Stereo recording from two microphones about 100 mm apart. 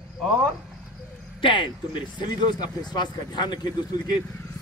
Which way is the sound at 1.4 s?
55° left (ahead or behind).